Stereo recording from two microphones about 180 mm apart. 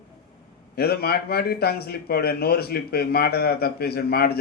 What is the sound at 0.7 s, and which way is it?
Speech, 60° left (ahead or behind).